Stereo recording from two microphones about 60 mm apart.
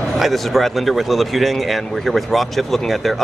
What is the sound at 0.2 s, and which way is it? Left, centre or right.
Speech, centre.